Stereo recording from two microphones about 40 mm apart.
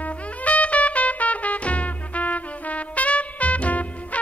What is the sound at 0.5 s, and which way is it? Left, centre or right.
Trumpet, left.